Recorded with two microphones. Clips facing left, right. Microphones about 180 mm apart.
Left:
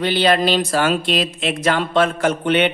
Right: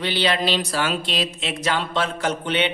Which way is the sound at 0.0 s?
50° left (ahead or behind).